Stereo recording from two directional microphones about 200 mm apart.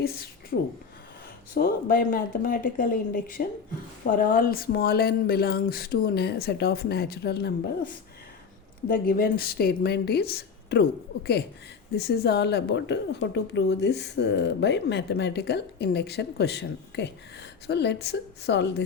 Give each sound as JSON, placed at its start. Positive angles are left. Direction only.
{"t": 0.0, "sound": "speech", "side_deg": 50}
{"t": 0.5, "sound": "a woman's voice", "side_deg": 65}
{"t": 1.5, "sound": "speech", "side_deg": 45}
{"t": 8.9, "sound": "a woman's voice", "side_deg": 45}